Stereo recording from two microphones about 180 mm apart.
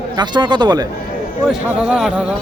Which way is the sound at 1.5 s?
5° right (ahead or behind).